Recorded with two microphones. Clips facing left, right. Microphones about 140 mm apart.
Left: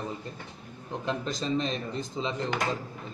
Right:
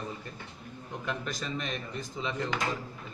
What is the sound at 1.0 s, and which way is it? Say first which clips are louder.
A man's voice: left 5 dB; 25° left (ahead or behind).